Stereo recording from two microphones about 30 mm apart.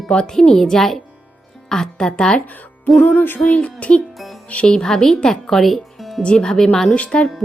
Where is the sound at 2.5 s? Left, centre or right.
Left.